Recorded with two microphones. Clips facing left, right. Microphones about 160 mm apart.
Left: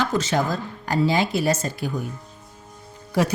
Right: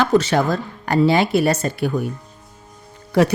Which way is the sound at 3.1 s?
65° right (ahead or behind).